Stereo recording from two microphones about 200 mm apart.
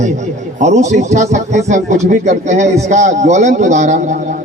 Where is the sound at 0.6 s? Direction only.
35° right (ahead or behind).